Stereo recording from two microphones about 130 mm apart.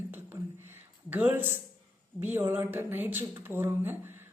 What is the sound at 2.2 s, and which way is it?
Speech, 15° right (ahead or behind).